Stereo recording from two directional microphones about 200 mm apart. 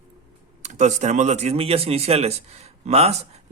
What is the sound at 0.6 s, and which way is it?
A man's voice, 35° right (ahead or behind).